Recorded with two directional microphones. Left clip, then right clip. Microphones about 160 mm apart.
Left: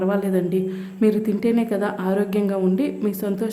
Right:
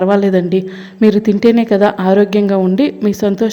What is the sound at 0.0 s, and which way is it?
A woman's voice, 35° right (ahead or behind).